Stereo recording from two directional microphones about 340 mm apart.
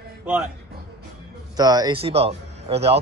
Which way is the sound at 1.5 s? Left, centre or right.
Centre.